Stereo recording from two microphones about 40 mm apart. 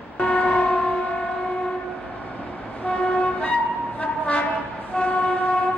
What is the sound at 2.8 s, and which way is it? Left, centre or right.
Vehicle, left.